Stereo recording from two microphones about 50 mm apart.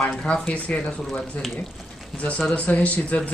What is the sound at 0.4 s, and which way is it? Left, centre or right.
Speech, left.